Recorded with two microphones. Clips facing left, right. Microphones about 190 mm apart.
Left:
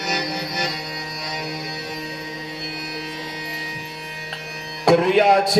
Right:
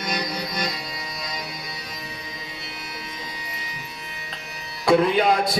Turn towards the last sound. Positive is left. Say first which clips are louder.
# left 4 dB
turn(degrees=70)  # may be behind; listen again after turning